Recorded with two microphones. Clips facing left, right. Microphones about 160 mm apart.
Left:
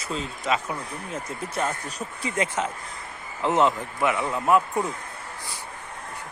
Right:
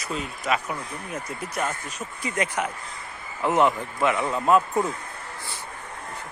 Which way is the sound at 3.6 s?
15° right (ahead or behind).